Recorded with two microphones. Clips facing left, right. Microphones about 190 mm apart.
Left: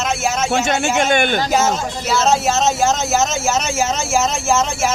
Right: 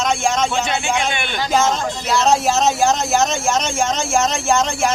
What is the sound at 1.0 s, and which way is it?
Speech, 45° left (ahead or behind).